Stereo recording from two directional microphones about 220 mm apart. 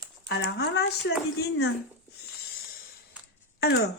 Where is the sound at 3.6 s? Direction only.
45° left (ahead or behind).